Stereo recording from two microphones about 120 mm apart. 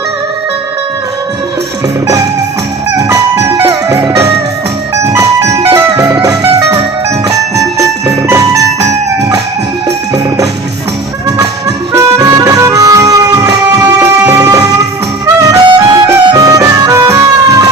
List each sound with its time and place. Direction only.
3.0 s music: 25° right (ahead or behind)
11.9 s music: 25° right (ahead or behind)